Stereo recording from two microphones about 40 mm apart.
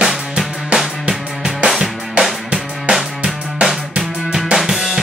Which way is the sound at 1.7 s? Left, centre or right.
Centre.